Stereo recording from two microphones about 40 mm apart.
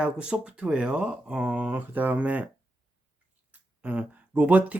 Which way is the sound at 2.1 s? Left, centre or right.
Right.